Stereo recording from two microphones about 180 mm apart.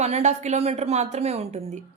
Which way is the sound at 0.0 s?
40° right (ahead or behind).